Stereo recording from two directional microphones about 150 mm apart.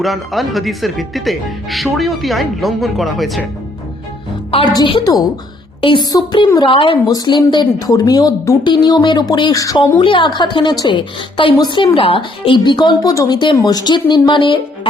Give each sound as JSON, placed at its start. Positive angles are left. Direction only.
{"t": 0.0, "sound": "speech", "side_deg": 0}
{"t": 4.7, "sound": "a woman's voice", "side_deg": 30}
{"t": 10.0, "sound": "a woman's voice", "side_deg": 35}